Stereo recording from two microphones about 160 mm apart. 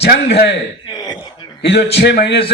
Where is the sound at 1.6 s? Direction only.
90° left.